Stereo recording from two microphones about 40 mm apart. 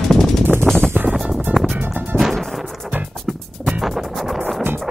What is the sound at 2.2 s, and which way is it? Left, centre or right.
Music, centre.